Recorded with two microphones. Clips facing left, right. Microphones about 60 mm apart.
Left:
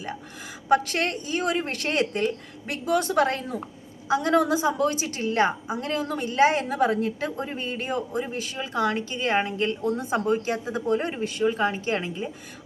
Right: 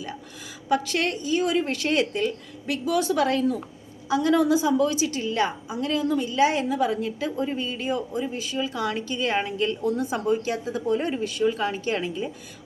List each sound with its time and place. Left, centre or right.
0.7 s a woman's voice: left
10.2 s a woman's voice: left